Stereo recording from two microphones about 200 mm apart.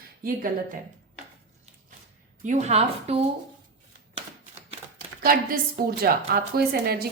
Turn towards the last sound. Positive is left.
turn(degrees=-50)  # may be behind; listen again after turning